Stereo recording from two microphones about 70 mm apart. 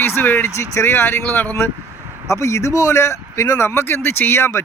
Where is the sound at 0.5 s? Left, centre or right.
Left.